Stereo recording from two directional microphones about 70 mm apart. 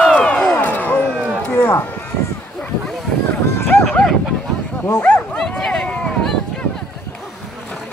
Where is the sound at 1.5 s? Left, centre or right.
Left.